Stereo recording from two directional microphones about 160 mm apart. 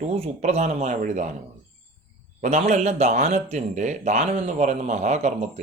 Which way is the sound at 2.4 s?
45° right (ahead or behind).